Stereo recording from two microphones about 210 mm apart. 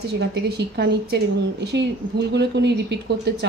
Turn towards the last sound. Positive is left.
turn(degrees=-55)  # may be behind; listen again after turning